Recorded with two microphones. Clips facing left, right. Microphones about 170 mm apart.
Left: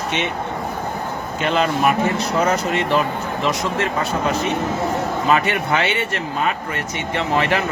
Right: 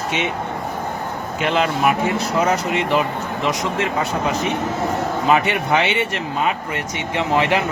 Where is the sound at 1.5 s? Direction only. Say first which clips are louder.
Left 1 dB; 5° right (ahead or behind).